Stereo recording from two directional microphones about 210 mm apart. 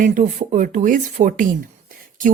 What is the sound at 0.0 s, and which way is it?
Speech, 35° right (ahead or behind).